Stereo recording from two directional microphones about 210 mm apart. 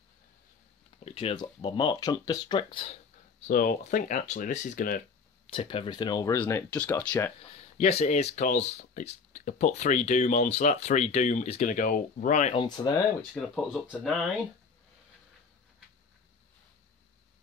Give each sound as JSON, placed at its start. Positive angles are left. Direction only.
{"t": 1.0, "sound": "speech", "side_deg": 25}
{"t": 3.4, "sound": "speech", "side_deg": 40}
{"t": 5.5, "sound": "speech", "side_deg": 25}
{"t": 7.7, "sound": "speech", "side_deg": 30}
{"t": 12.6, "sound": "speech", "side_deg": 20}
{"t": 13.3, "sound": "speech", "side_deg": 0}